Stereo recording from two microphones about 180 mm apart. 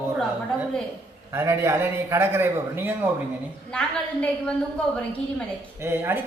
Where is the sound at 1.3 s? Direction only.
15° right (ahead or behind).